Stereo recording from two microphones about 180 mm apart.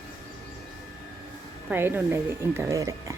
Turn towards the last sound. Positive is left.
turn(degrees=-20)  # may be behind; listen again after turning